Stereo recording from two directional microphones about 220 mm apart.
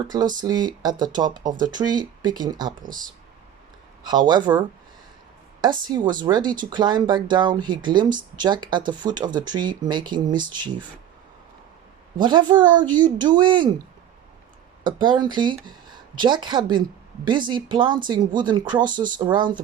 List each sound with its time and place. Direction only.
0.1 s speech: 20° right (ahead or behind)
4.3 s speech: 20° right (ahead or behind)
5.6 s speech: 20° right (ahead or behind)
12.1 s speech: 20° right (ahead or behind)
14.8 s speech: 20° right (ahead or behind)